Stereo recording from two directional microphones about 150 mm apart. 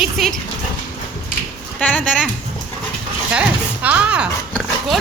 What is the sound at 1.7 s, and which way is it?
Speech, 10° left (ahead or behind).